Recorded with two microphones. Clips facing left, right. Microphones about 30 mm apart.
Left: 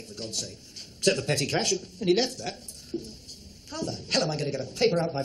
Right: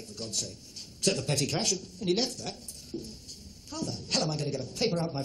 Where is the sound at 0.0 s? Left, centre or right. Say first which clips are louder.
Left 1 dB; left.